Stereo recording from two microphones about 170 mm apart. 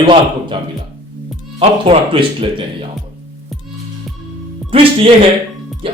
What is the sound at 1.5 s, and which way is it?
Speech, 30° right (ahead or behind).